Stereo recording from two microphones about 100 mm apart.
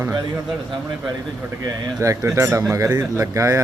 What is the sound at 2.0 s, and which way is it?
Speech, 30° right (ahead or behind).